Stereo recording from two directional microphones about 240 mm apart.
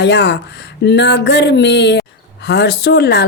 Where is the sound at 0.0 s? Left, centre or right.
Left.